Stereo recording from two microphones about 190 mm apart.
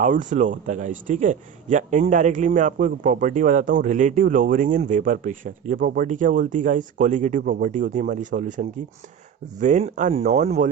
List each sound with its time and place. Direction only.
0.0 s a man's voice: 40° right (ahead or behind)